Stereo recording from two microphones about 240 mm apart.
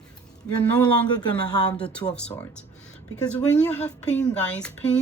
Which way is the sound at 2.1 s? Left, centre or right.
Centre.